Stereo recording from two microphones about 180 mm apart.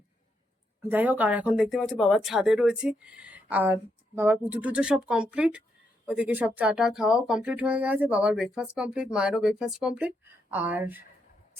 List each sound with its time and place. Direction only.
0.8 s speech: 10° right (ahead or behind)